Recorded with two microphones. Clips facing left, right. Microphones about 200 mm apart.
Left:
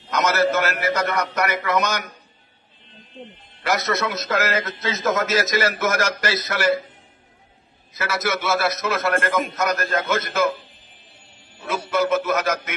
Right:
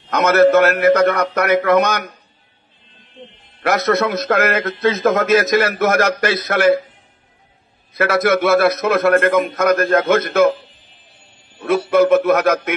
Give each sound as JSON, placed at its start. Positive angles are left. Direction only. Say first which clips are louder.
{"t": 0.1, "sound": "a man's voice", "louder": "right 8 dB", "side_deg": -55}
{"t": 3.6, "sound": "a man's voice", "louder": "right 6 dB", "side_deg": -55}
{"t": 7.9, "sound": "a man's voice", "louder": "right 9 dB", "side_deg": -60}
{"t": 11.9, "sound": "a man's voice", "louder": "right 8 dB", "side_deg": -60}